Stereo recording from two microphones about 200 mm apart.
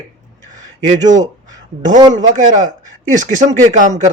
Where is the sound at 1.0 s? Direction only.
20° right (ahead or behind).